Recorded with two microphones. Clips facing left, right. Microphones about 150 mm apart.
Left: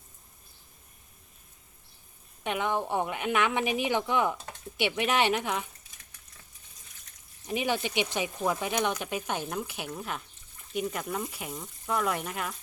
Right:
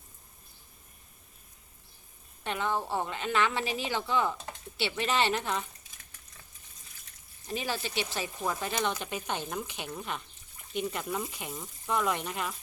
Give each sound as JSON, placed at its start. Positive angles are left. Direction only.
{"t": 2.4, "sound": "a woman's voice", "side_deg": 15}
{"t": 7.4, "sound": "a woman's voice", "side_deg": 15}